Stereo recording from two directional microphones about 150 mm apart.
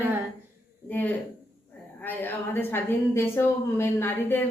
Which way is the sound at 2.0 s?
15° left (ahead or behind).